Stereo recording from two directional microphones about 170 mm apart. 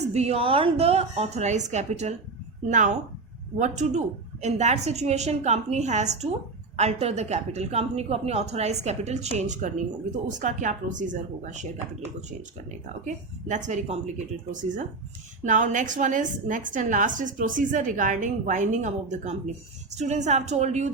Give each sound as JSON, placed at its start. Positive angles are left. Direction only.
{"t": 0.1, "sound": "a woman's voice", "side_deg": -40}
{"t": 13.1, "sound": "a woman's voice", "side_deg": -45}
{"t": 15.4, "sound": "a woman's voice", "side_deg": -45}